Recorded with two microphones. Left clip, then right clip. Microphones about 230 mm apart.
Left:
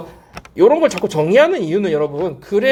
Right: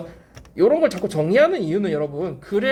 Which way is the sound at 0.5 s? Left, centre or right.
Left.